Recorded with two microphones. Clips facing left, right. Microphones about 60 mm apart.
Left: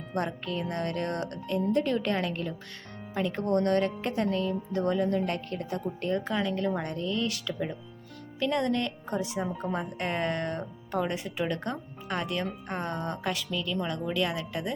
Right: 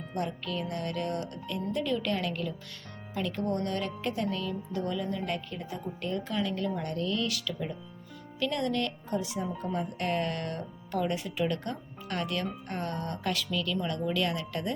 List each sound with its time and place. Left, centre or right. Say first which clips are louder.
0.1 s speech: left 2 dB; left
3.4 s speech: left 8 dB; left
5.0 s a woman's voice: left 5 dB; left
6.0 s speech: left 2 dB; left; by 14.7 s centre